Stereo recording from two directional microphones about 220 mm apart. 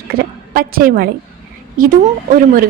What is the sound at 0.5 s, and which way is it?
A woman's voice, 40° right (ahead or behind).